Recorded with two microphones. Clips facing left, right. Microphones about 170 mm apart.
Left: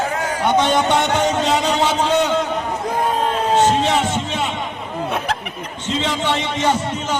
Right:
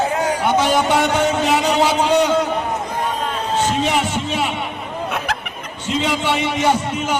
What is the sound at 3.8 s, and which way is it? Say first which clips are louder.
Music: left 1 dB; 10° right (ahead or behind).